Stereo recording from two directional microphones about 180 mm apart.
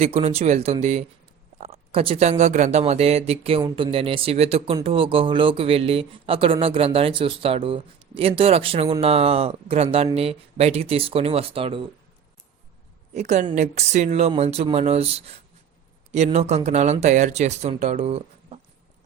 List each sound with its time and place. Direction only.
0.0 s speech: 35° right (ahead or behind)
13.1 s speech: 40° right (ahead or behind)